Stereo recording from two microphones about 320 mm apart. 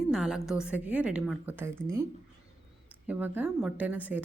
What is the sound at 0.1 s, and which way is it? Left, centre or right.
Speech, centre.